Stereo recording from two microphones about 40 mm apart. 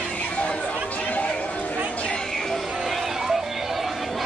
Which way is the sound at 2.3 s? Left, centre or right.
Centre.